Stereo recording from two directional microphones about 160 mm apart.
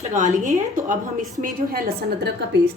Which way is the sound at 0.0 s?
50° right (ahead or behind).